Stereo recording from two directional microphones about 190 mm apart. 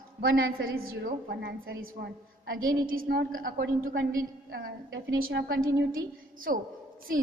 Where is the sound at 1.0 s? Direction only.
50° right (ahead or behind).